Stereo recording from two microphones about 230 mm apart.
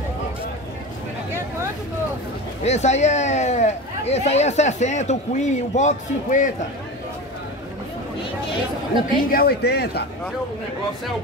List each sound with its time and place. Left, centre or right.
2.6 s speech: left
9.3 s speech: left